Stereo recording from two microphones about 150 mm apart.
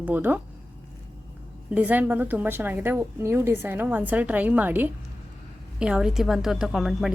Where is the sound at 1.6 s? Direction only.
10° right (ahead or behind).